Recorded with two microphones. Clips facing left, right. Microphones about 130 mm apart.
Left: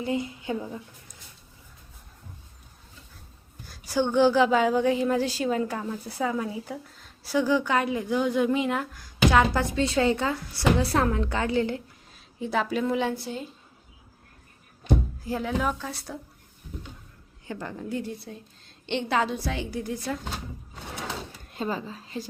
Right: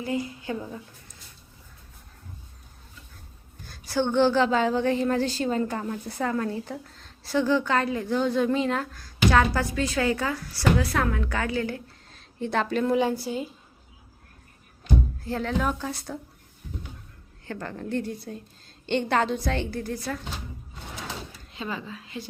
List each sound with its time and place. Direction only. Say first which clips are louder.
0.0 s a woman's voice: left 1 dB; 25° left (ahead or behind)
3.7 s a woman's voice: even; 10° left (ahead or behind)
12.1 s speech: right 1 dB; 5° left (ahead or behind)
15.2 s speech: even; 10° left (ahead or behind)
17.4 s a woman's voice: right 1 dB; 15° left (ahead or behind)
19.8 s speech: even; 15° left (ahead or behind)
21.5 s a woman's voice: left 3 dB; 40° left (ahead or behind)